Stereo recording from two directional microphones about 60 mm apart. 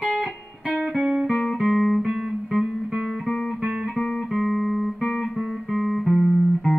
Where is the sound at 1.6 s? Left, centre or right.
Centre.